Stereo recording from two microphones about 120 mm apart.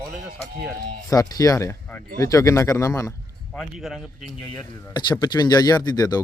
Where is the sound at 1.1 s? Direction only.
30° left (ahead or behind).